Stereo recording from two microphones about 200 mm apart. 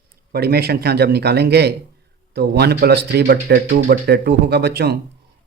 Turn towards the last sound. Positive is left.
turn(degrees=-55)  # may be behind; listen again after turning